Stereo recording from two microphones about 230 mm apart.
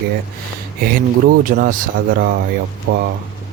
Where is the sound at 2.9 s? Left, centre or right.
Right.